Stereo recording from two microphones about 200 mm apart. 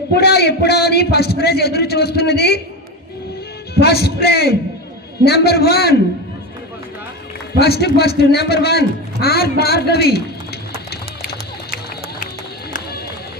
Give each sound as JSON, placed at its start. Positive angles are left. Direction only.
{"t": 0.2, "sound": "a man's voice", "side_deg": 55}
{"t": 3.8, "sound": "a man's voice", "side_deg": 55}
{"t": 7.6, "sound": "a man's voice", "side_deg": 55}